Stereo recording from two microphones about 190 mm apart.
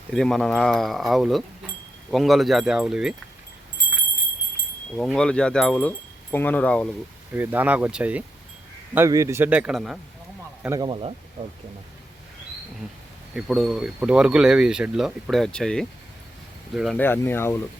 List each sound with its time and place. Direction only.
0.1 s speech: 5° left (ahead or behind)
4.9 s speech: 5° left (ahead or behind)
7.3 s speech: 10° right (ahead or behind)
10.6 s speech: 20° right (ahead or behind)
13.3 s speech: 5° right (ahead or behind)
17.0 s speech: 10° left (ahead or behind)